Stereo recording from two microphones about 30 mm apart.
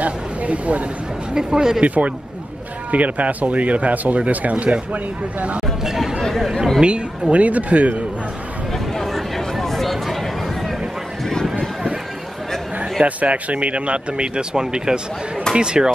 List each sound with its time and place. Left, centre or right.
0.0 s a sound: right
1.3 s speech: centre
1.8 s speech: right
2.9 s speech: right
5.9 s speech: centre
6.8 s speech: right
7.3 s speech: right
8.9 s a sound: centre
13.0 s speech: right